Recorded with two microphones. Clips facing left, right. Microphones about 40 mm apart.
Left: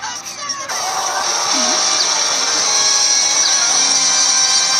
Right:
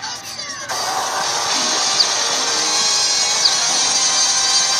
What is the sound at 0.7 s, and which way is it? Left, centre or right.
Music, centre.